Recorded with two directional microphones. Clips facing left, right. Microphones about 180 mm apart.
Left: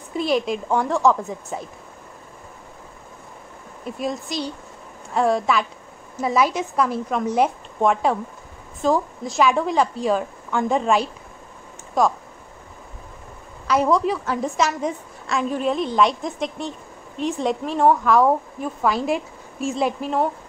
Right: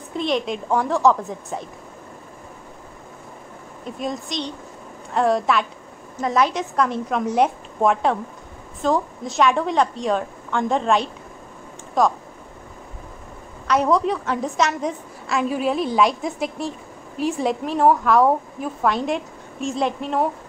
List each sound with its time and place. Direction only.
0.1 s a woman's voice: 5° left (ahead or behind)
3.8 s a woman's voice: 5° left (ahead or behind)
13.7 s a woman's voice: centre (ahead or behind)